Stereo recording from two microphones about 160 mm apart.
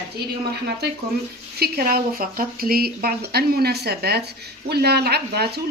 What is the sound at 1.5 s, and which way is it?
Speech, 75° right (ahead or behind).